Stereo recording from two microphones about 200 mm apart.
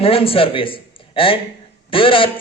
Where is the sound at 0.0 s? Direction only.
30° left (ahead or behind).